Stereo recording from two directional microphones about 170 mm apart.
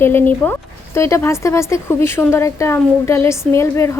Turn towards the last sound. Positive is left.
turn(degrees=15)  # may be behind; listen again after turning